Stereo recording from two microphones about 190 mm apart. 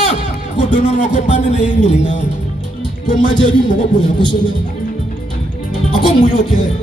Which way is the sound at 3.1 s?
25° left (ahead or behind).